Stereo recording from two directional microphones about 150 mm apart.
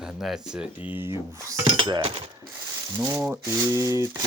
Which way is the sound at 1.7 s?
30° right (ahead or behind).